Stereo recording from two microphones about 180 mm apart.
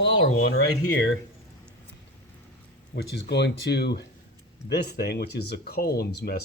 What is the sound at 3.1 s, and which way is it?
Speech, 75° left (ahead or behind).